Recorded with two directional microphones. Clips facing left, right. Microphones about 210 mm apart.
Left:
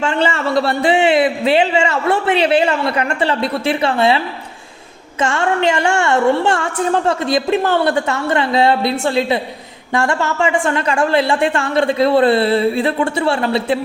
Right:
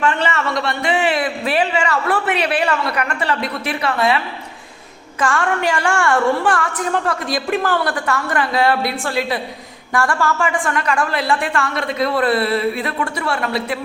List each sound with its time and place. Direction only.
0.0 s a woman's voice: 30° left (ahead or behind)
5.2 s a woman's voice: 25° left (ahead or behind)